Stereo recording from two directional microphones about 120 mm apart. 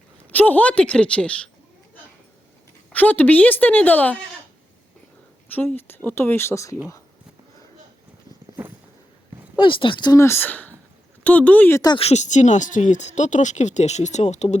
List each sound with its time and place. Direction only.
0.3 s speech: 15° left (ahead or behind)
2.9 s speech: 15° left (ahead or behind)
5.5 s speech: 15° left (ahead or behind)
9.6 s speech: 45° left (ahead or behind)
10.1 s speech: 20° left (ahead or behind)
11.9 s speech: 65° left (ahead or behind)